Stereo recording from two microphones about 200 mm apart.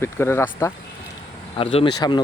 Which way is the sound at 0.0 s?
10° left (ahead or behind).